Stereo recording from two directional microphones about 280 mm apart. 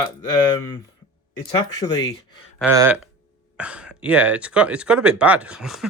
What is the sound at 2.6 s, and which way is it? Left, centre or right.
Speech, centre.